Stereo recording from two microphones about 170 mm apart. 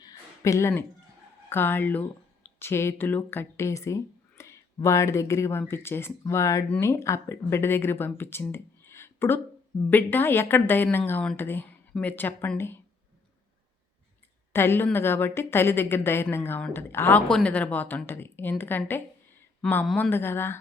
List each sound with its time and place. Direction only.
0.0 s a sound: 20° left (ahead or behind)
1.5 s a woman's voice: 15° left (ahead or behind)
14.5 s a woman's voice: 15° left (ahead or behind)